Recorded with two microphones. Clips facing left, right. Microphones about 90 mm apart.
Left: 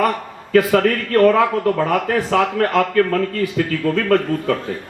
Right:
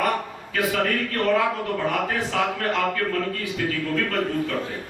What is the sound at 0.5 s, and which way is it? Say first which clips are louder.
Speech: left 9 dB; 60° left (ahead or behind).